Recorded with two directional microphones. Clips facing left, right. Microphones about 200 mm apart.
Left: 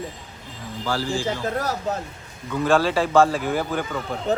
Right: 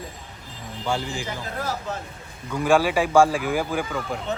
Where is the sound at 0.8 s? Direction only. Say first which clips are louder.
Left 2 dB; 20° right (ahead or behind).